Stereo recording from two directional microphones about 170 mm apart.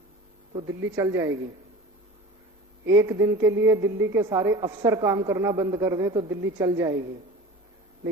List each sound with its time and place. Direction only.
0.7 s a woman's voice: 15° right (ahead or behind)
2.8 s a woman's voice: 15° right (ahead or behind)